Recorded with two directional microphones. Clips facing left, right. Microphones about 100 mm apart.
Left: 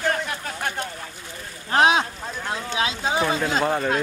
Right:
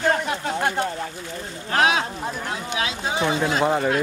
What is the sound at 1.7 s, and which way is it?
Speech, 25° left (ahead or behind).